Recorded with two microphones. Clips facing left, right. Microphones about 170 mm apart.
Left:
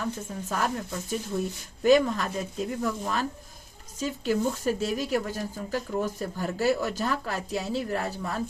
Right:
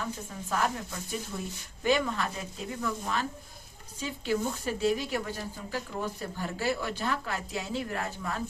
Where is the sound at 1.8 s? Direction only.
40° left (ahead or behind).